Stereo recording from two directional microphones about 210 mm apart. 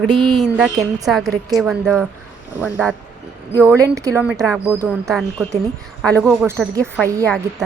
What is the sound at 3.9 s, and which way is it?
A woman's voice, 15° right (ahead or behind).